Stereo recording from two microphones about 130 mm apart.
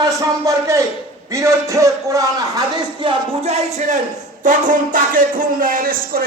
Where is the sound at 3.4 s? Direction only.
55° right (ahead or behind).